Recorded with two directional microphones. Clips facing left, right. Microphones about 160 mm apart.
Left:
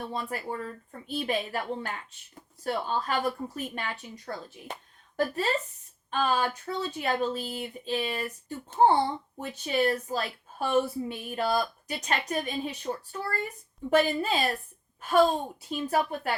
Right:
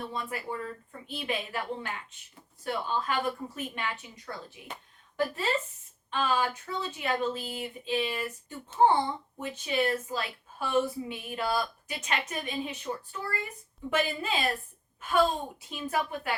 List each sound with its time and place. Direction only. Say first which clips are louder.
0.1 s speech: left 2 dB; 40° left (ahead or behind)
15.7 s speech: left 4 dB; 40° left (ahead or behind)